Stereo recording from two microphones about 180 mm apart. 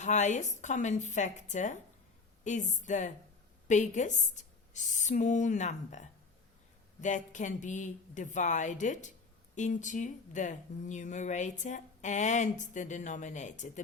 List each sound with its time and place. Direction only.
0.0 s speech: 40° left (ahead or behind)